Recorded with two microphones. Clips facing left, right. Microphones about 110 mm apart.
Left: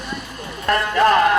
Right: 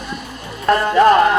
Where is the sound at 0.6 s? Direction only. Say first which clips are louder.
Right 4 dB; 30° right (ahead or behind).